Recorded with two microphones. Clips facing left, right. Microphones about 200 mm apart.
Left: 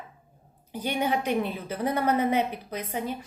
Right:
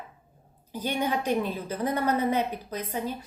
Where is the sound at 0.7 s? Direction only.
15° left (ahead or behind).